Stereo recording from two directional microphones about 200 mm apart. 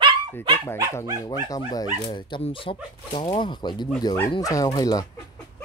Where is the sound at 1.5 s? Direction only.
20° left (ahead or behind).